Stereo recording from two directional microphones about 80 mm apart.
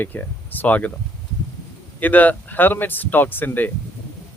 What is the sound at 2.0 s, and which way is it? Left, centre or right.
Speech, centre.